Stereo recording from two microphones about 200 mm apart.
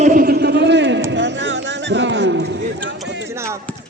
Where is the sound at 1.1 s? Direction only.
65° right (ahead or behind).